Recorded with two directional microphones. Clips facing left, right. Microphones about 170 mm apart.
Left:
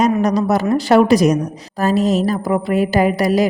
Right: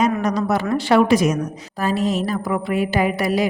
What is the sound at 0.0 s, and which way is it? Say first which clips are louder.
A woman's voice: left 4 dB; 35° left (ahead or behind).